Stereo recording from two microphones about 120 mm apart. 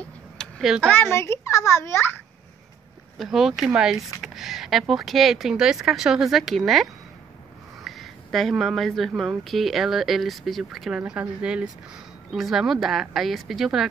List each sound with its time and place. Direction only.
0.4 s a sound: 5° left (ahead or behind)
0.8 s a child's voice: 15° left (ahead or behind)
3.2 s speech: centre (ahead or behind)